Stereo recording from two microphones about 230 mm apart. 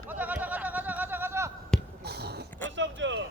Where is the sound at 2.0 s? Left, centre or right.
Right.